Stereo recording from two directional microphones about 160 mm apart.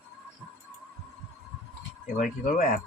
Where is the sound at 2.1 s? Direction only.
55° left (ahead or behind).